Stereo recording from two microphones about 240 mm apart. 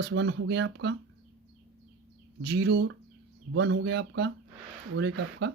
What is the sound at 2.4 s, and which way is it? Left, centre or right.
Speech, right.